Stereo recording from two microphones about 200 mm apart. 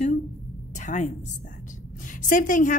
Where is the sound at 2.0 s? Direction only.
40° left (ahead or behind).